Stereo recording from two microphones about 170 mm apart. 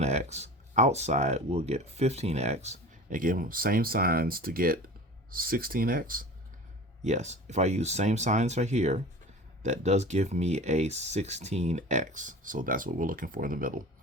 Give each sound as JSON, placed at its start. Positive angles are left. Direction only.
{"t": 0.0, "sound": "speech", "side_deg": -40}
{"t": 7.0, "sound": "speech", "side_deg": -45}